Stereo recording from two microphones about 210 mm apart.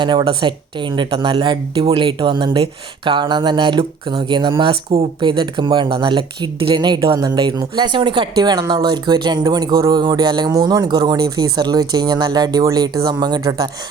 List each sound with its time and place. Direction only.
0.0 s speech: 20° right (ahead or behind)